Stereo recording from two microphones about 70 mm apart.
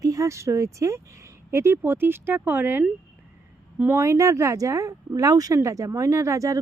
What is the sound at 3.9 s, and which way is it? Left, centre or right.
Speech, right.